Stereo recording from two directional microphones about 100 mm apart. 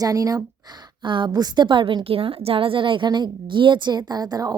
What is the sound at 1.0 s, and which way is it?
A woman's voice, 50° right (ahead or behind).